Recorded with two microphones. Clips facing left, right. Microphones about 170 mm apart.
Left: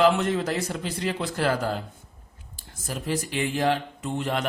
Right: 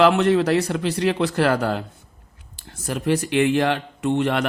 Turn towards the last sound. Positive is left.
turn(degrees=-75)  # may be behind; listen again after turning